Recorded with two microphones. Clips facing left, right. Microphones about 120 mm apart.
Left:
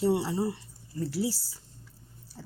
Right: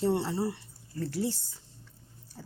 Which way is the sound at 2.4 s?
Centre (ahead or behind).